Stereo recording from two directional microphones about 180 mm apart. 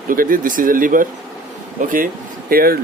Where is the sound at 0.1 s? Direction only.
50° right (ahead or behind).